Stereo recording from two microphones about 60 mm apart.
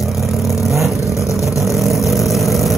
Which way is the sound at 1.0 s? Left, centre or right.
Left.